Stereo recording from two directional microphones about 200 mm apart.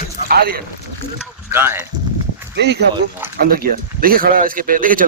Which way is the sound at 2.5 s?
55° right (ahead or behind).